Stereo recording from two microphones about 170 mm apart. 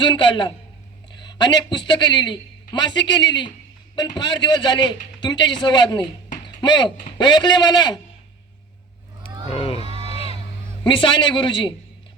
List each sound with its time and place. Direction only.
0.0 s a man's voice: 30° left (ahead or behind)
6.4 s a sound: 25° left (ahead or behind)
7.0 s a man's voice: 25° left (ahead or behind)
9.5 s sheep: 35° left (ahead or behind)
9.8 s a sound: 35° right (ahead or behind)
10.8 s a man's voice: 30° left (ahead or behind)